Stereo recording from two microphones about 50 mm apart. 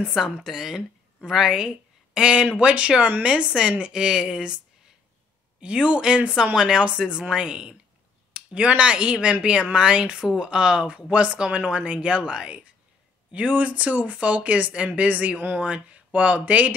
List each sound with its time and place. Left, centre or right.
0.1 s a woman's voice: centre
5.6 s a woman's voice: right